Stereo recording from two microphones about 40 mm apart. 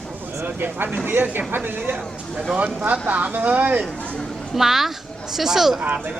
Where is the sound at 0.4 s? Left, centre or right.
Right.